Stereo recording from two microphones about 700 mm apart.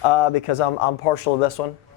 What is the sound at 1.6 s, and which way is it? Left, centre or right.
Speech, left.